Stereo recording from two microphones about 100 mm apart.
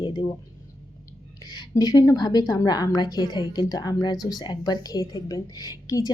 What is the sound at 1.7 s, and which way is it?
A woman's voice, 40° left (ahead or behind).